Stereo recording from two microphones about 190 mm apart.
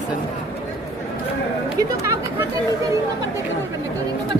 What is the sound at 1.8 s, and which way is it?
Speech, 15° right (ahead or behind).